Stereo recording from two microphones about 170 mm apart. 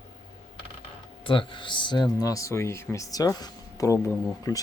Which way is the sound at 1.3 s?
30° left (ahead or behind).